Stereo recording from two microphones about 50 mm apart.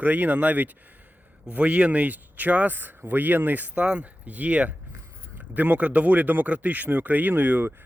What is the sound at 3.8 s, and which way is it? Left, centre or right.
Speech, right.